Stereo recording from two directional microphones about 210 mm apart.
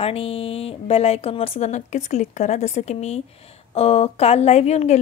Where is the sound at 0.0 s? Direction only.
25° left (ahead or behind).